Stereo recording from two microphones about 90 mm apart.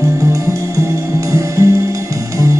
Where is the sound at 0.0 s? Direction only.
35° right (ahead or behind).